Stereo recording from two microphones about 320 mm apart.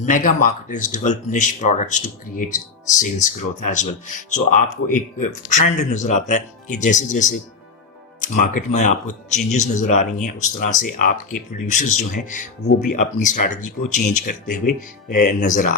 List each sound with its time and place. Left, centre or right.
0.0 s speech: left